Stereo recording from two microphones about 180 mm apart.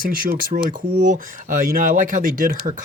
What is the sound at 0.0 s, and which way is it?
Speech, 50° right (ahead or behind).